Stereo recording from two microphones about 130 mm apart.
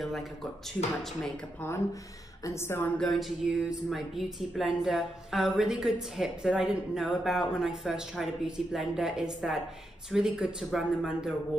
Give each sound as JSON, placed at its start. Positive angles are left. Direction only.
{"t": 2.4, "sound": "a woman's voice", "side_deg": 20}
{"t": 3.0, "sound": "speech", "side_deg": 0}